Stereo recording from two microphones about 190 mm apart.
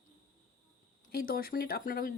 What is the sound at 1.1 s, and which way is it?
Speech, 50° left (ahead or behind).